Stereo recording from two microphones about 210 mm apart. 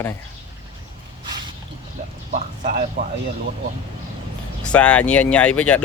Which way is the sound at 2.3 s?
40° right (ahead or behind).